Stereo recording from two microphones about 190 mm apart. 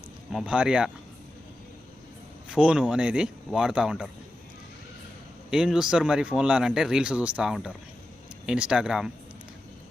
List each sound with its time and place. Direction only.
0.3 s speech: 5° right (ahead or behind)
2.5 s speech: 5° right (ahead or behind)
5.5 s speech: 5° right (ahead or behind)